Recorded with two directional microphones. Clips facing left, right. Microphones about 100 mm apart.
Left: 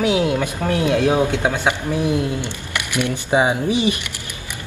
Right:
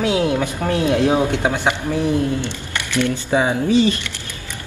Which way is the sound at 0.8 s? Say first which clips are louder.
Right 1 dB; 20° right (ahead or behind).